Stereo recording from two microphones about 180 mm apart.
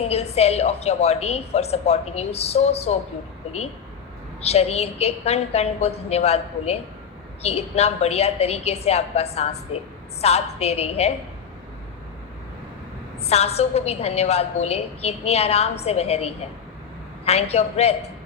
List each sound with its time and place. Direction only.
0.1 s a woman's voice: 35° left (ahead or behind)
4.4 s a woman's voice: 35° left (ahead or behind)
13.2 s a woman's voice: 35° left (ahead or behind)